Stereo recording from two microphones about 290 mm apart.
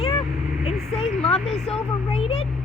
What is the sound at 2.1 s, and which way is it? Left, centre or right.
Speech, centre.